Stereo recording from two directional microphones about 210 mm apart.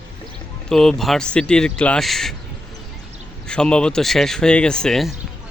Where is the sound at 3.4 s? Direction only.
5° left (ahead or behind).